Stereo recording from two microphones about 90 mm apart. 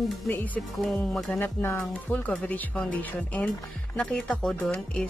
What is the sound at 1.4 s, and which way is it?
Speech, 25° left (ahead or behind).